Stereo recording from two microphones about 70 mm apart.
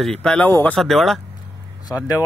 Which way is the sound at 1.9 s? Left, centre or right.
Left.